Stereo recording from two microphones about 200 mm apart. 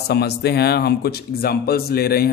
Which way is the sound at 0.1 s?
55° left (ahead or behind).